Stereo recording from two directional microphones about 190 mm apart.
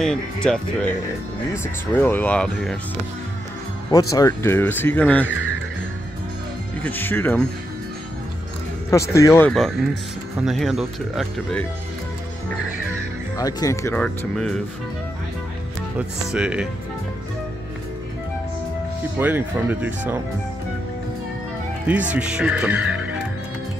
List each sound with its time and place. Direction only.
0.0 s speech: 5° left (ahead or behind)
3.9 s speech: 20° left (ahead or behind)
6.8 s speech: 10° left (ahead or behind)
8.9 s speech: 15° left (ahead or behind)
9.5 s speech: centre (ahead or behind)
13.4 s speech: 20° left (ahead or behind)
13.9 s speech: 5° left (ahead or behind)
16.3 s speech: 5° right (ahead or behind)
19.1 s speech: 10° right (ahead or behind)
21.8 s speech: 10° right (ahead or behind)